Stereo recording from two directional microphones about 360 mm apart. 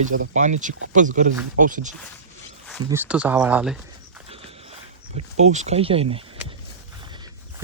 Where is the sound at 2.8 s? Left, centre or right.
Centre.